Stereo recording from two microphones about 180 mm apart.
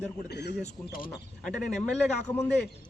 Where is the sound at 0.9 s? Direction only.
50° left (ahead or behind).